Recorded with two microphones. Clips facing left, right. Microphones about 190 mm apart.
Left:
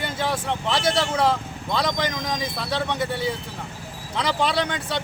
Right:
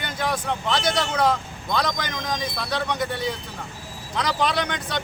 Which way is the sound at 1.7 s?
30° left (ahead or behind).